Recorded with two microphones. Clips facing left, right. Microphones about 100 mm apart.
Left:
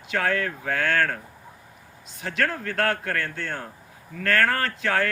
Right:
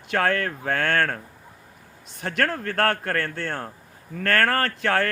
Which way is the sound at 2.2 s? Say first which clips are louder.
Right 2 dB; 50° right (ahead or behind).